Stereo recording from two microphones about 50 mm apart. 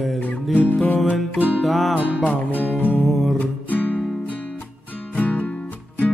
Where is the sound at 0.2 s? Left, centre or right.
Left.